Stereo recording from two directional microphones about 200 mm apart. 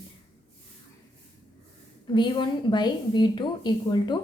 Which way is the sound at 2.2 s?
25° left (ahead or behind).